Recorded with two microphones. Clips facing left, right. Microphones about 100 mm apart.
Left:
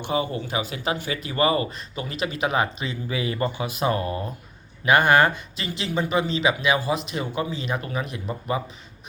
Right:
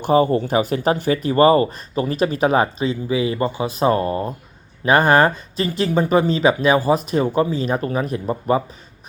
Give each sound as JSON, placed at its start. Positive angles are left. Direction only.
{"t": 0.0, "sound": "speech", "side_deg": -45}